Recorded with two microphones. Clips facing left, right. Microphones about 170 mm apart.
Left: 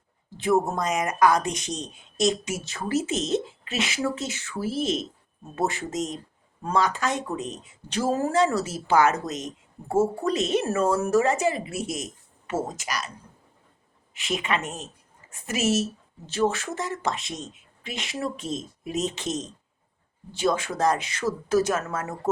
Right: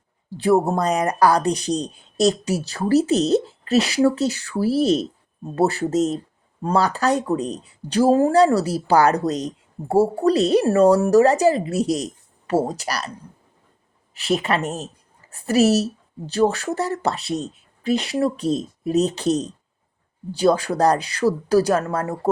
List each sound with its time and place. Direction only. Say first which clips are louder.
0.3 s speech: right 5 dB; 35° right (ahead or behind)
14.1 s speech: right 6 dB; 35° right (ahead or behind)